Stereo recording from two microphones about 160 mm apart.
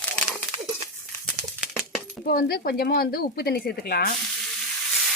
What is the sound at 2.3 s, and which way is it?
Speech, 70° left (ahead or behind).